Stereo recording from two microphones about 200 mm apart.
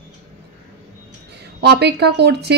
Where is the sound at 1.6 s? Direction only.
55° right (ahead or behind).